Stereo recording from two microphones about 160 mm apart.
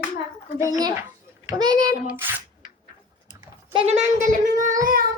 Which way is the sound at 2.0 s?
15° right (ahead or behind).